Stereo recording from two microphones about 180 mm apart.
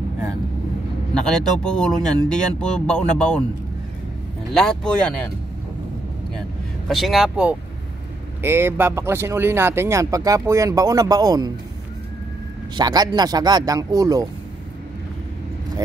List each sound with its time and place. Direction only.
1.2 s speech: 5° left (ahead or behind)
4.6 s speech: 5° left (ahead or behind)
6.9 s speech: centre (ahead or behind); by 11.5 s 20° right (ahead or behind)
12.7 s speech: 20° right (ahead or behind)